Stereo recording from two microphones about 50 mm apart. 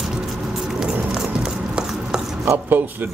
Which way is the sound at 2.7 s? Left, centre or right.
Right.